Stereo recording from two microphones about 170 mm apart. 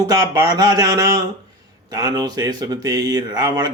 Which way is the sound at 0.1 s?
20° right (ahead or behind).